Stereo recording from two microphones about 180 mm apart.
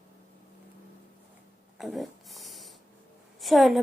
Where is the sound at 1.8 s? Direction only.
Centre (ahead or behind).